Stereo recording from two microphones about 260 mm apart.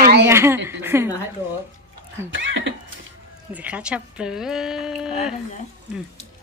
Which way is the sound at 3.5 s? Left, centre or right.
Centre.